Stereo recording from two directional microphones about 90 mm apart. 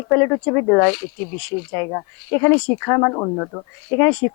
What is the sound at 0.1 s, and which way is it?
Speech, 25° left (ahead or behind).